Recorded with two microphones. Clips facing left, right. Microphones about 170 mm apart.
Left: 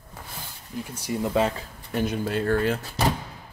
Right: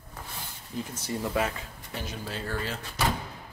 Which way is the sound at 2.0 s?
55° left (ahead or behind).